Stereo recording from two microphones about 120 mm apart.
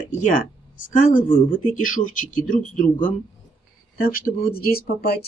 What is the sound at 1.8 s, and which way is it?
Speech, 90° left.